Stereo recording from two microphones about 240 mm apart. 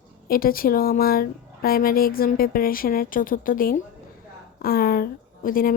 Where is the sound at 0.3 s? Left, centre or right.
Left.